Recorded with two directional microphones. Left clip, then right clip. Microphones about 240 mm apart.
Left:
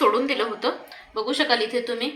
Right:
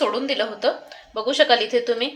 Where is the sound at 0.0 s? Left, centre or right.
Right.